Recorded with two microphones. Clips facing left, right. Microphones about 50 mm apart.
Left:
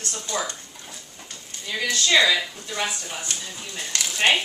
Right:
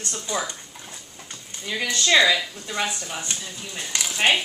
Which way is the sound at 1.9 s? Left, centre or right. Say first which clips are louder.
Right 1 dB; right.